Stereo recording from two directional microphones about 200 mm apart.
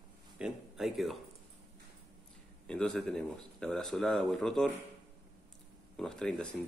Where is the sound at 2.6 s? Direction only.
5° left (ahead or behind).